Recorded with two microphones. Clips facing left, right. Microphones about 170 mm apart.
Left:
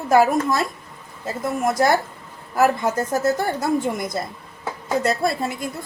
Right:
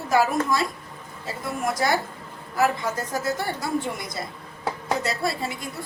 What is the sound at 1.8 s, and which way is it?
A woman's voice, 50° left (ahead or behind).